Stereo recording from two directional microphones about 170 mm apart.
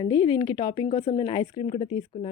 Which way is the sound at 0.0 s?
25° left (ahead or behind).